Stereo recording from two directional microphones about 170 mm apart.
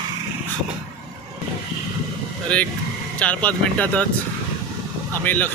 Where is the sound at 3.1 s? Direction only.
10° left (ahead or behind).